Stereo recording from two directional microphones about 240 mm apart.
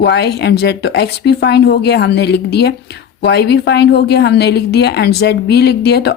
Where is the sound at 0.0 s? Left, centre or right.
Left.